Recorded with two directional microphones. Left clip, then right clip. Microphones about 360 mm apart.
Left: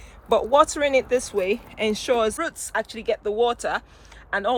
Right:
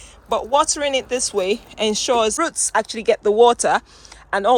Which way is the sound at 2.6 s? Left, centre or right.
Centre.